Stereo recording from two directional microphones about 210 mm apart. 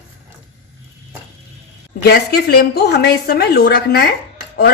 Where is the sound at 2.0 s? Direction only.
50° left (ahead or behind).